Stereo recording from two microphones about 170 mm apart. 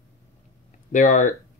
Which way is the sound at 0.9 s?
45° left (ahead or behind).